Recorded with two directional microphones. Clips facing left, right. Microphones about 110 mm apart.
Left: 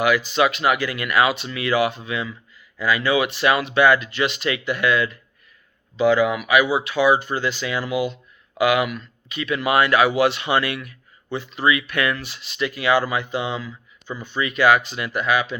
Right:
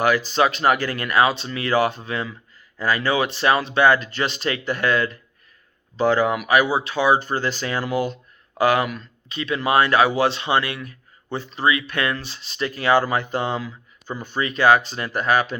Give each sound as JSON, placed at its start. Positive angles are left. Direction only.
{"t": 0.0, "sound": "speech", "side_deg": -35}